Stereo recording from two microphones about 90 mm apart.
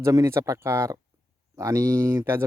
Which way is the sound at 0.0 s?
35° right (ahead or behind).